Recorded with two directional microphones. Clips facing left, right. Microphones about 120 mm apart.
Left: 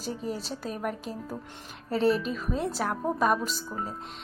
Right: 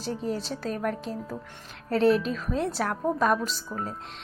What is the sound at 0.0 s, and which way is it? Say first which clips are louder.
A woman's voice: right 3 dB; 5° left (ahead or behind).